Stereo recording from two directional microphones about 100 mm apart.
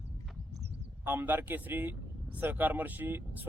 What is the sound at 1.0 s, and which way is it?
Speech, 20° right (ahead or behind).